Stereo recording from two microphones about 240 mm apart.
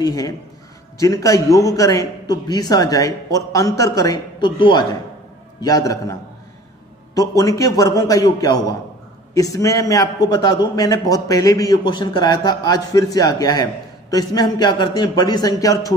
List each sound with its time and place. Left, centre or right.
0.0 s a man's voice: centre
7.2 s a man's voice: centre